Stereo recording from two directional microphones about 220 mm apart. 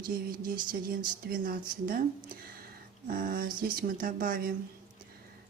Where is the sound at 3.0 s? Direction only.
40° right (ahead or behind).